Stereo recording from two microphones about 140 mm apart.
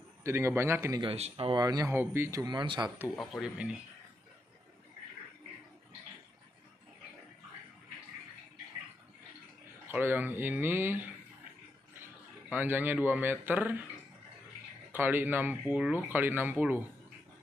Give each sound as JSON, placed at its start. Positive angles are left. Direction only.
{"t": 0.2, "sound": "a man's voice", "side_deg": -20}
{"t": 1.0, "sound": "speech", "side_deg": -40}
{"t": 1.9, "sound": "speech", "side_deg": -15}
{"t": 2.4, "sound": "speech", "side_deg": -35}
{"t": 3.2, "sound": "speech", "side_deg": -5}
{"t": 9.8, "sound": "speech", "side_deg": -15}
{"t": 12.4, "sound": "speech", "side_deg": -15}
{"t": 14.9, "sound": "speech", "side_deg": -15}